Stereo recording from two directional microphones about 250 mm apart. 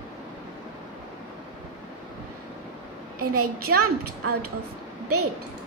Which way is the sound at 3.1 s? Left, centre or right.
Right.